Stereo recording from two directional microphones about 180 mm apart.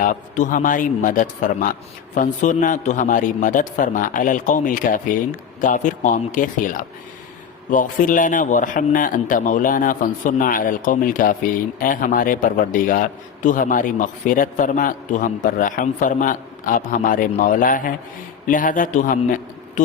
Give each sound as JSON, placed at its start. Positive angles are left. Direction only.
{"t": 0.0, "sound": "a man's voice", "side_deg": 45}